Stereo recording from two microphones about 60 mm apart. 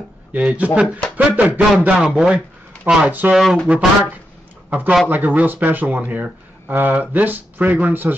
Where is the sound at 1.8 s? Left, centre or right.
Centre.